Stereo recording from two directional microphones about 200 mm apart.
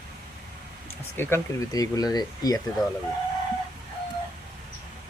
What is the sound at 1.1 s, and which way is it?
Speech, 10° left (ahead or behind).